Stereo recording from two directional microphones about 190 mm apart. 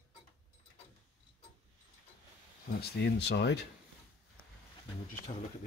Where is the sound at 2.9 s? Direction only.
60° left (ahead or behind).